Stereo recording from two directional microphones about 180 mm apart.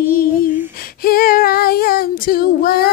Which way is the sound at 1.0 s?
55° left (ahead or behind).